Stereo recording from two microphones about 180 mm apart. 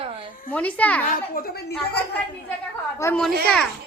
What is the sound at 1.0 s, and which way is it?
Speech, 55° left (ahead or behind).